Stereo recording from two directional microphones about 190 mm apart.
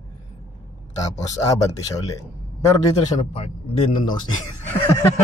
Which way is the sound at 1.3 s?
15° left (ahead or behind).